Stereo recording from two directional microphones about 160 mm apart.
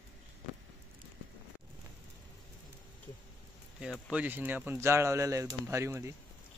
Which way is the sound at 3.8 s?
5° right (ahead or behind).